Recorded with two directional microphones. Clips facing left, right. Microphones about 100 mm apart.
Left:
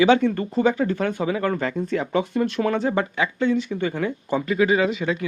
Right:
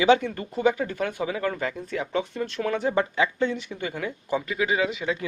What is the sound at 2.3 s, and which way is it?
Speech, 60° left (ahead or behind).